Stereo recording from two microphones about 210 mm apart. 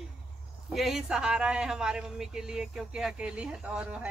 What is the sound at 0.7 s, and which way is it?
A man's voice, centre (ahead or behind).